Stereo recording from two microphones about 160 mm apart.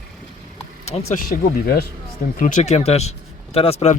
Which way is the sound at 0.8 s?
40° left (ahead or behind).